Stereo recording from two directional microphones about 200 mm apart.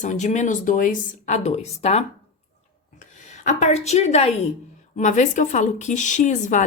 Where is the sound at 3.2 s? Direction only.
35° left (ahead or behind).